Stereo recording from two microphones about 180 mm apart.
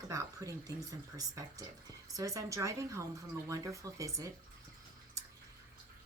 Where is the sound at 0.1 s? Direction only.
20° right (ahead or behind).